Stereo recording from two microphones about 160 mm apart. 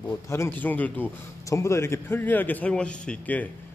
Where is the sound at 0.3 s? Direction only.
15° left (ahead or behind).